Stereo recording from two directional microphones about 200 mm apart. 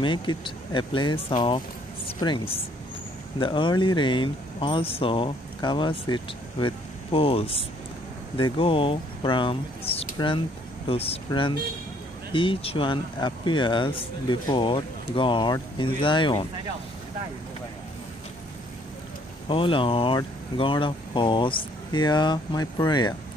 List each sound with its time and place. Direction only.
0.0 s speech: 25° left (ahead or behind)
19.4 s speech: 25° left (ahead or behind)